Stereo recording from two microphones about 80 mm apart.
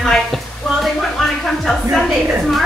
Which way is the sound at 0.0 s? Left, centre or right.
Centre.